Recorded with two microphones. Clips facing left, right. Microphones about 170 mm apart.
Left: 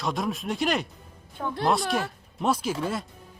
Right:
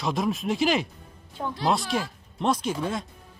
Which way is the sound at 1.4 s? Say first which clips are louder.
Even; 25° right (ahead or behind).